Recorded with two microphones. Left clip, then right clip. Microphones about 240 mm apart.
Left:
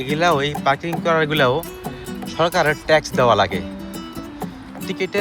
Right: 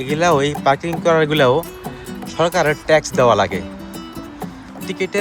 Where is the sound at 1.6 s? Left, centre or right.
Centre.